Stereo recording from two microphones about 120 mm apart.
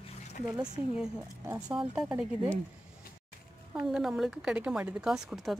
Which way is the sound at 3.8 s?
5° right (ahead or behind).